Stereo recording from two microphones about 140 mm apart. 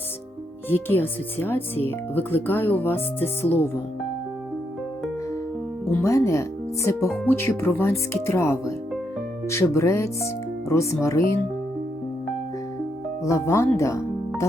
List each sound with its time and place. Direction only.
0.7 s speech: 15° left (ahead or behind)
5.9 s speech: 20° left (ahead or behind)
13.2 s speech: 20° left (ahead or behind)